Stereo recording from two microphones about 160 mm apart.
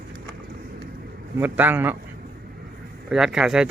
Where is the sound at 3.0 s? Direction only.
5° right (ahead or behind).